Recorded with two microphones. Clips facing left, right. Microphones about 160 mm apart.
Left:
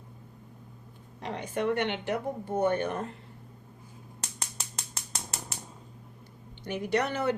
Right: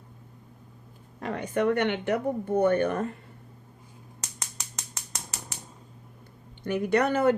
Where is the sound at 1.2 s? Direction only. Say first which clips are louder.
Right 4 dB; 55° right (ahead or behind).